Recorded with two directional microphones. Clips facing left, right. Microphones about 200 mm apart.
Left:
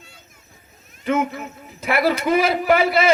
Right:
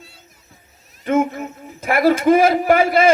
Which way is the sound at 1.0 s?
45° right (ahead or behind).